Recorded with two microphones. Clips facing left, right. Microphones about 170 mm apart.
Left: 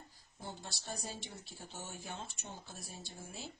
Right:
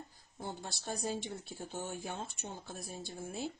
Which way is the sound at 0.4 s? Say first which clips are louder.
Right 5 dB; 55° right (ahead or behind).